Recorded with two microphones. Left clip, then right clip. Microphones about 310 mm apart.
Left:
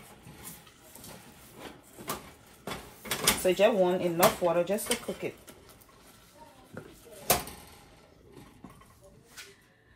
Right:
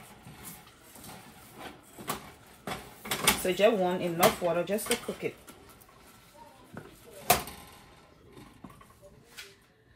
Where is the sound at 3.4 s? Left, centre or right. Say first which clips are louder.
Left 2 dB; centre.